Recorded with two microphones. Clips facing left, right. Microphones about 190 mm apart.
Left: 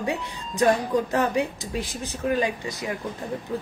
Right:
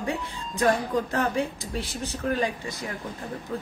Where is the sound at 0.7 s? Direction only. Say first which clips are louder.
Left 1 dB; 15° left (ahead or behind).